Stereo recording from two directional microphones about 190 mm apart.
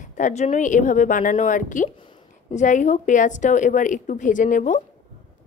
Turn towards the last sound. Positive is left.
turn(degrees=40)  # may be behind; listen again after turning